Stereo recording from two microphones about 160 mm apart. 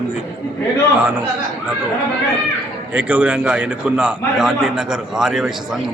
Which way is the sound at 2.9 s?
10° right (ahead or behind).